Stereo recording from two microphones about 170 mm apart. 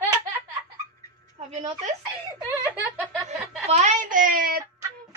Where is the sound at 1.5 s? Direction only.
40° right (ahead or behind).